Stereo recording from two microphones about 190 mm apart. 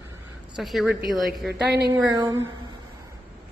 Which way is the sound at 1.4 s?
60° right (ahead or behind).